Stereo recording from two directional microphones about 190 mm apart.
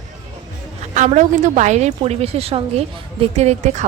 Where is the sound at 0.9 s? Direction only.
40° right (ahead or behind).